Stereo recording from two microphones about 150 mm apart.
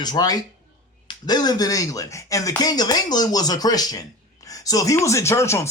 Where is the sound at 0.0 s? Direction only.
25° left (ahead or behind).